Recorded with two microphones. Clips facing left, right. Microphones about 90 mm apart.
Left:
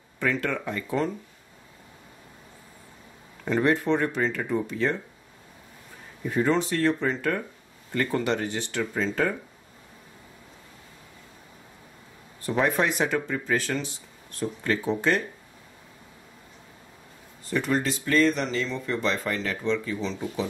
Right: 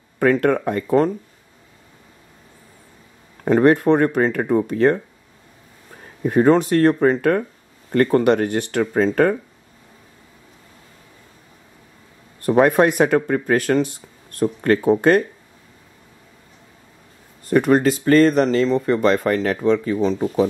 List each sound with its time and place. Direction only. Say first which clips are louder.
0.2 s speech: right 11 dB; 50° right (ahead or behind)
3.4 s speech: right 9 dB; 55° right (ahead or behind)
6.2 s speech: right 9 dB; 50° right (ahead or behind)
12.4 s speech: right 10 dB; 55° right (ahead or behind)
17.5 s speech: right 10 dB; 50° right (ahead or behind)